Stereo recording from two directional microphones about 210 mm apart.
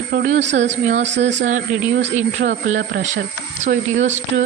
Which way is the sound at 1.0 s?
60° right (ahead or behind).